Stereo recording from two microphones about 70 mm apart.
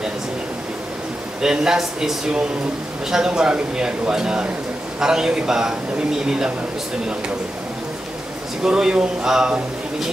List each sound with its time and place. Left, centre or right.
1.4 s a man's voice: centre
8.6 s a man's voice: centre